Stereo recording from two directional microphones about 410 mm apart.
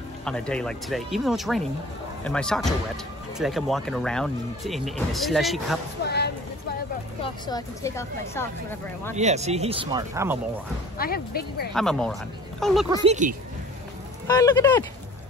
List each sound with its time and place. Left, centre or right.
0.2 s speech: centre
6.0 s a sound: left
7.4 s speech: centre
9.1 s speech: centre
11.0 s speech: left
11.7 s speech: centre
12.9 s speech: centre
14.2 s speech: centre